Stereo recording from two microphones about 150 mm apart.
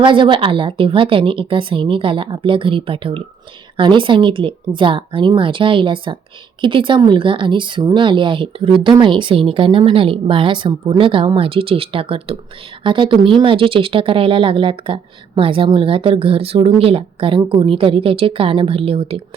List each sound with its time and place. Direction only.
0.0 s speech: 35° right (ahead or behind)